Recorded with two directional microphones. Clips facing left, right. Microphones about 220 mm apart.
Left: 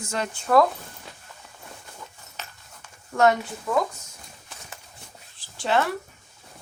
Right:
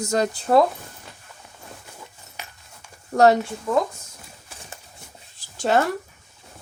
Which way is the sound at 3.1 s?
35° right (ahead or behind).